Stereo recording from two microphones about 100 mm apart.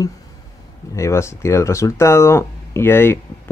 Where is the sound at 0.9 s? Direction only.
30° left (ahead or behind).